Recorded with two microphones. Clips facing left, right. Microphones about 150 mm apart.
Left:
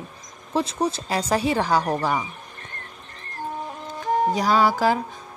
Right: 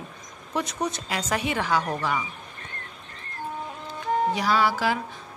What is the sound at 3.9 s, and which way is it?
Speech, 40° left (ahead or behind).